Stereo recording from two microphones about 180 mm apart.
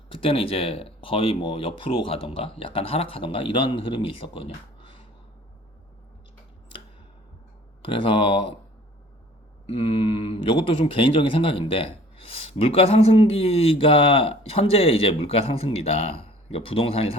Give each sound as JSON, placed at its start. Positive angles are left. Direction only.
{"t": 0.1, "sound": "speech", "side_deg": 30}
{"t": 7.9, "sound": "speech", "side_deg": 30}
{"t": 9.6, "sound": "speech", "side_deg": 30}